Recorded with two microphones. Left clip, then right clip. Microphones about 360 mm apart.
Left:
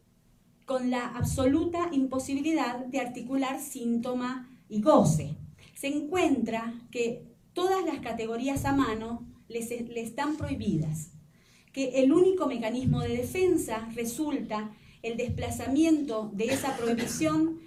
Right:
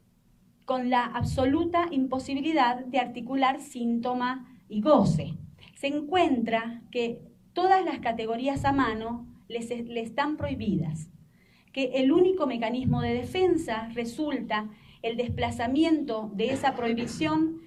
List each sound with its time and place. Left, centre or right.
0.7 s a woman's voice: right
11.7 s a woman's voice: right